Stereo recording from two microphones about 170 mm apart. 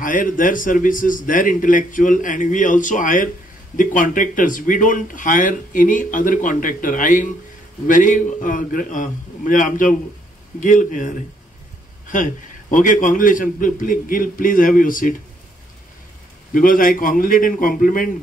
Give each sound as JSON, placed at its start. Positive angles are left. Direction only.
{"t": 0.0, "sound": "speech", "side_deg": 55}
{"t": 12.7, "sound": "speech", "side_deg": 50}
{"t": 16.5, "sound": "speech", "side_deg": 55}